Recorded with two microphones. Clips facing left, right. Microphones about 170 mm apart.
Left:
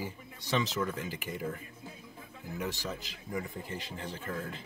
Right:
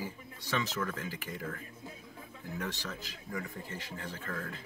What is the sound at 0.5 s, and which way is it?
Speech, 20° left (ahead or behind).